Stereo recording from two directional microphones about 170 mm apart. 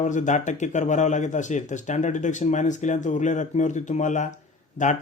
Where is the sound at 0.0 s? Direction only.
45° left (ahead or behind).